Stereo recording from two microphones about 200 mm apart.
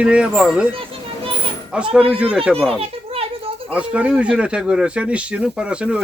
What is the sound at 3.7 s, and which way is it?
A man's voice, 5° right (ahead or behind).